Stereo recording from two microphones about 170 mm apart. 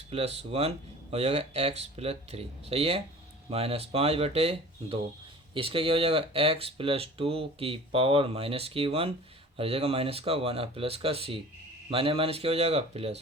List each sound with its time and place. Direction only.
0.1 s speech: 35° right (ahead or behind)